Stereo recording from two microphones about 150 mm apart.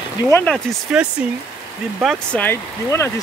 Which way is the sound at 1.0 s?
5° right (ahead or behind).